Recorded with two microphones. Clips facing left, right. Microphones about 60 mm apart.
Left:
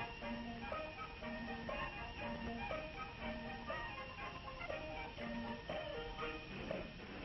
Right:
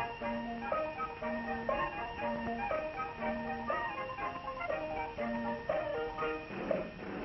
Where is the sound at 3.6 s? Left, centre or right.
Right.